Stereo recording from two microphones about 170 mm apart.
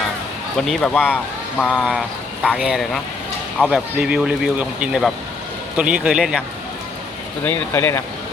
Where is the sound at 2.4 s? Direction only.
5° right (ahead or behind).